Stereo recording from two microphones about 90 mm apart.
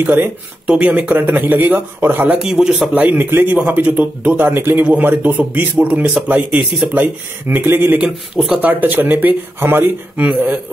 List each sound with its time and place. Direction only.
0.0 s speech: 20° right (ahead or behind)
2.4 s speech: 5° right (ahead or behind)
2.9 s speech: 20° right (ahead or behind)